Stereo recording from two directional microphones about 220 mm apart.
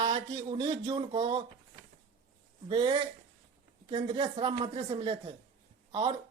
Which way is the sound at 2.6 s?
20° right (ahead or behind).